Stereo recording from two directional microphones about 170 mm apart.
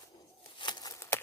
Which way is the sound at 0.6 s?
25° left (ahead or behind).